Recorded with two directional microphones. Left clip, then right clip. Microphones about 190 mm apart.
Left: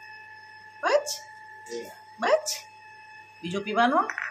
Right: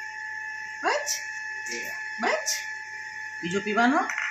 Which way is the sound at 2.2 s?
20° left (ahead or behind).